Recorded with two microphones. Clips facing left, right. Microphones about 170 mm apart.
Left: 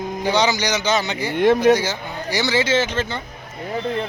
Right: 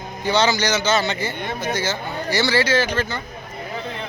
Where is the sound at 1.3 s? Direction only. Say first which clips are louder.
Left 13 dB; 90° left.